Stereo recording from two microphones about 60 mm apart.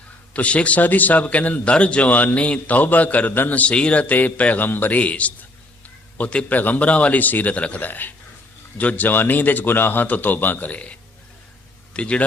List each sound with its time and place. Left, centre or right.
0.3 s a man's voice: left
7.9 s speech: left
11.9 s a man's voice: centre